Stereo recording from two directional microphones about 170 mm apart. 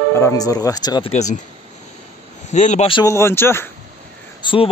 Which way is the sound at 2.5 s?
45° left (ahead or behind).